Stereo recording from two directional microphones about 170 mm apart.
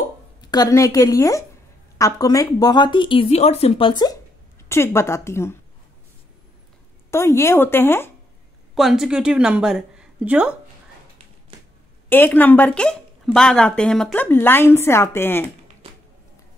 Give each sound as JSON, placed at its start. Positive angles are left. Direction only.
{"t": 0.4, "sound": "speech", "side_deg": 25}
{"t": 7.1, "sound": "speech", "side_deg": 15}
{"t": 8.7, "sound": "a woman's voice", "side_deg": 0}
{"t": 12.1, "sound": "speech", "side_deg": 10}
{"t": 15.8, "sound": "a sound", "side_deg": -35}